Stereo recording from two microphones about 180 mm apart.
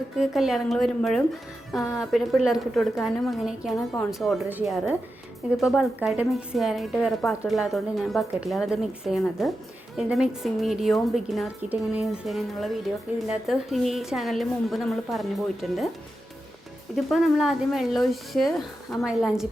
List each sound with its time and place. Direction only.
0.2 s a woman's voice: centre (ahead or behind)
16.9 s a woman's voice: centre (ahead or behind)